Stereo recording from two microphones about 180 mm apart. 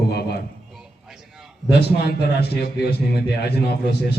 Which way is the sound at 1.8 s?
65° left (ahead or behind).